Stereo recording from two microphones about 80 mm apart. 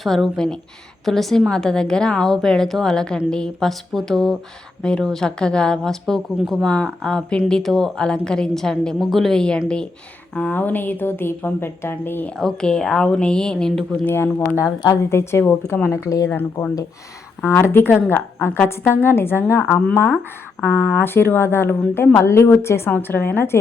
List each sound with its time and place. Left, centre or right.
0.0 s a woman's voice: centre; by 12.3 s left
12.4 s a woman's voice: centre
14.0 s a woman's voice: left
16.3 s a woman's voice: left
19.6 s a woman's voice: centre